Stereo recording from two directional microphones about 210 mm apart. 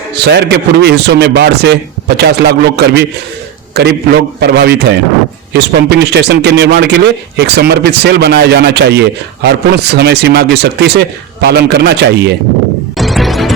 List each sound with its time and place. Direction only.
0.3 s a man's voice: 55° right (ahead or behind)
13.0 s music: centre (ahead or behind)